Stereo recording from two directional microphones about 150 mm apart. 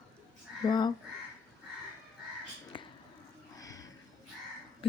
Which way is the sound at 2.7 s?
35° left (ahead or behind).